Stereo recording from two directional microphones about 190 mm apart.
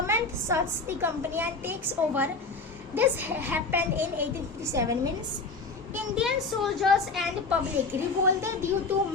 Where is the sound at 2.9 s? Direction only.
10° right (ahead or behind).